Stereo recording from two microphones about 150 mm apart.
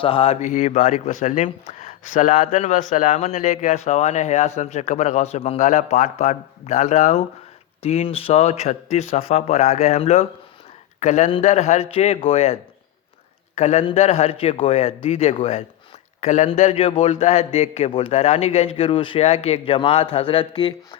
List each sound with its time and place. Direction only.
0.0 s speech: 40° left (ahead or behind)
13.6 s speech: 50° left (ahead or behind)
16.2 s a man's voice: 55° left (ahead or behind); by 21.0 s 35° left (ahead or behind)